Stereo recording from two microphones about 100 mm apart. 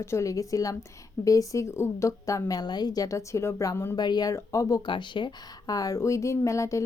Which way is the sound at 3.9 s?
45° left (ahead or behind).